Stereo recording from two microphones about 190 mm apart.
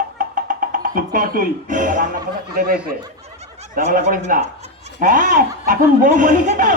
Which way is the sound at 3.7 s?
45° right (ahead or behind).